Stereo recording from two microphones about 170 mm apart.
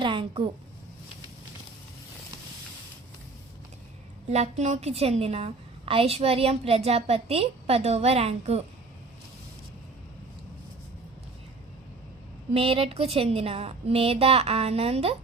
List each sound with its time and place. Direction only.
0.0 s a woman's voice: 30° right (ahead or behind)
4.3 s a woman's voice: 40° right (ahead or behind)
12.5 s a woman's voice: 35° right (ahead or behind)